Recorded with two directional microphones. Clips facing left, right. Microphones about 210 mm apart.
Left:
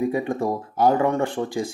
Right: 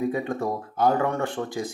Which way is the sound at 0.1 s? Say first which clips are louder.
Left 3 dB; 20° left (ahead or behind).